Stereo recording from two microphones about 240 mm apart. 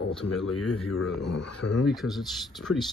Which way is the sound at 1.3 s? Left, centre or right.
Left.